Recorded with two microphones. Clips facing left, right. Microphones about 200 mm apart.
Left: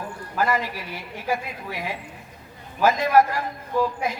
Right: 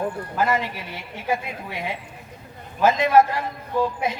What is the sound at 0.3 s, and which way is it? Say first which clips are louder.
A woman's voice: even; 25° right (ahead or behind).